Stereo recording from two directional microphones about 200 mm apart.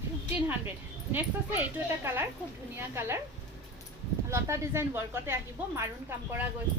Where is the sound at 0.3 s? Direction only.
10° right (ahead or behind).